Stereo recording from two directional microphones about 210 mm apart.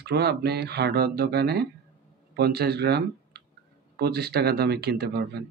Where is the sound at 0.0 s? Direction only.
50° right (ahead or behind).